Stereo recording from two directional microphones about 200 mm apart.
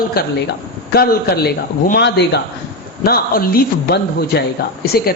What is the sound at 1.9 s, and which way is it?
A man's voice, 55° left (ahead or behind).